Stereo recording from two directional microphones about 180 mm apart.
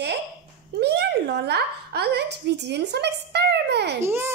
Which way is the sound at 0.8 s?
65° right (ahead or behind).